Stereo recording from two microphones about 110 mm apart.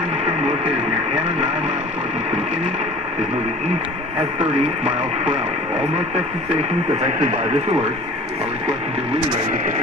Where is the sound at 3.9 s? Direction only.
70° right (ahead or behind).